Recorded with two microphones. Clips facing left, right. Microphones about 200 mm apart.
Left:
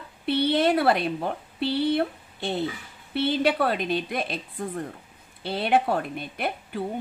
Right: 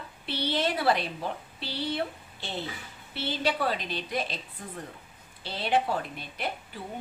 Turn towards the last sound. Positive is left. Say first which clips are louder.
# left 5 dB
turn(degrees=55)  # may be behind; listen again after turning